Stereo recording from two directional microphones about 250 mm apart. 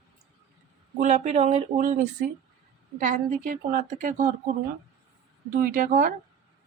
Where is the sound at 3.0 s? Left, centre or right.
Right.